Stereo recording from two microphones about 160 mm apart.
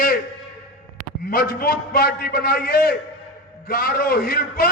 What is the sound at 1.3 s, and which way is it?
A man's voice, 70° left (ahead or behind).